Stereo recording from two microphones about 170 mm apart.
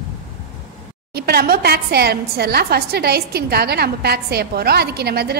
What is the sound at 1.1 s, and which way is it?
A woman's voice, 65° right (ahead or behind).